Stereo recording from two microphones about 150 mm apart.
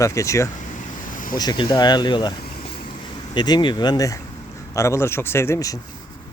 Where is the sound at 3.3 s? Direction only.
30° left (ahead or behind).